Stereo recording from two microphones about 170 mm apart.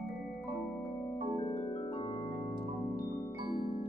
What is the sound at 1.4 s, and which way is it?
Music, 30° left (ahead or behind).